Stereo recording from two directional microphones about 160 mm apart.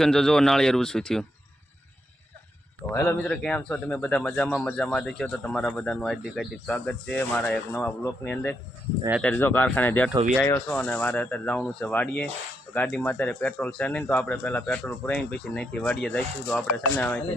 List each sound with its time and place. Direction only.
0.0 s speech: 5° left (ahead or behind)
2.9 s speech: 15° left (ahead or behind)
3.2 s speech: 5° left (ahead or behind)